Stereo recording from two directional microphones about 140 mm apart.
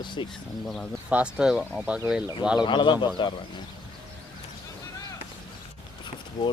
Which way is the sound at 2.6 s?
35° left (ahead or behind).